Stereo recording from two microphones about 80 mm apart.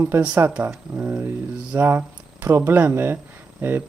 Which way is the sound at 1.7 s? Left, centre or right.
Right.